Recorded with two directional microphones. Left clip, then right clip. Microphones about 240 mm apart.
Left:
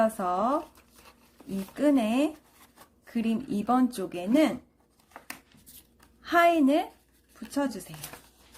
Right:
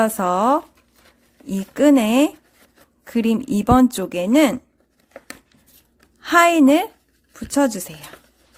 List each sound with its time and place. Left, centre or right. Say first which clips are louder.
0.0 s speech: right 8 dB; right
1.7 s speech: right 10 dB; right
6.2 s speech: right 8 dB; right